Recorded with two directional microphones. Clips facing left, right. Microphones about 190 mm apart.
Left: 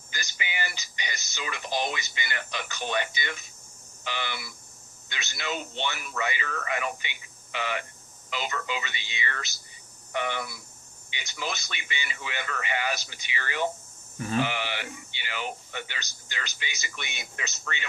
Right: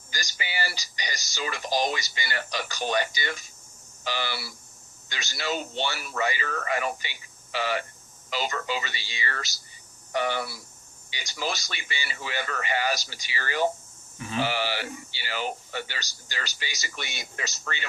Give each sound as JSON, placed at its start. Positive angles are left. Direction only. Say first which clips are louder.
{"t": 0.1, "sound": "speech", "louder": "right 1 dB", "side_deg": -35}